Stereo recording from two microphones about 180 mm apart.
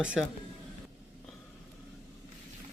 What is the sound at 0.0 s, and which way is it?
Speech, 5° right (ahead or behind).